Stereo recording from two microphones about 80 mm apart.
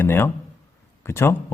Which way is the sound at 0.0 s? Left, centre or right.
Left.